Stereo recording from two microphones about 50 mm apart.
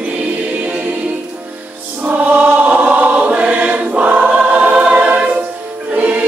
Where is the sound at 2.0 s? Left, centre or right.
Right.